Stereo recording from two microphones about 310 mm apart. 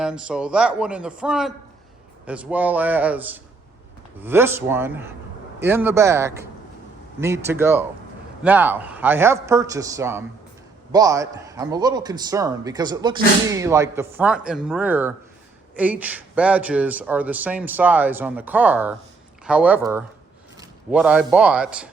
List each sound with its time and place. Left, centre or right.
0.0 s a man's voice: centre